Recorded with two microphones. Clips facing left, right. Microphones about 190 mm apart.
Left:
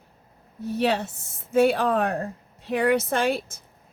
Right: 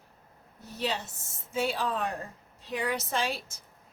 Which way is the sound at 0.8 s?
60° left (ahead or behind).